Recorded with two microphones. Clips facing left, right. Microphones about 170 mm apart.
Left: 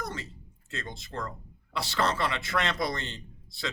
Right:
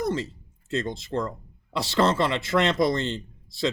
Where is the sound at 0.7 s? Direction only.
25° right (ahead or behind).